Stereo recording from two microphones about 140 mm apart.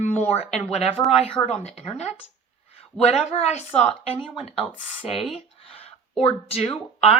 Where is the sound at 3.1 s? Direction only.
50° left (ahead or behind).